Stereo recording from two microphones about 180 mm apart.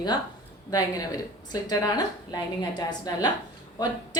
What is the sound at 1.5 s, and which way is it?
Speech, 20° left (ahead or behind).